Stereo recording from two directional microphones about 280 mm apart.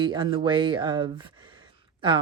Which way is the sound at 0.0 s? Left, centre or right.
Centre.